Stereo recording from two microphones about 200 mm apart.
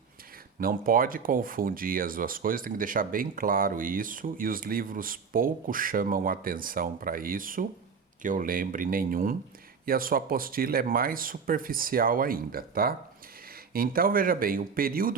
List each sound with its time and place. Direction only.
0.6 s speech: 45° right (ahead or behind)